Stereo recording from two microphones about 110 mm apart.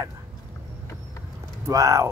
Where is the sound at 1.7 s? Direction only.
30° right (ahead or behind).